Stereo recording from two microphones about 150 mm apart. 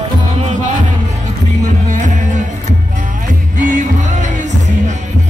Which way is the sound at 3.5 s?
55° right (ahead or behind).